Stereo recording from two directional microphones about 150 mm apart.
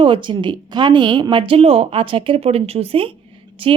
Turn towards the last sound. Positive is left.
turn(degrees=-35)  # may be behind; listen again after turning